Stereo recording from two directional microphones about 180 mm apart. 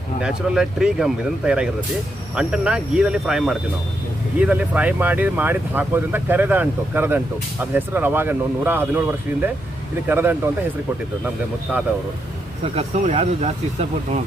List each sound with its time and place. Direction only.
0.2 s speech: 5° right (ahead or behind)
12.7 s speech: 35° right (ahead or behind)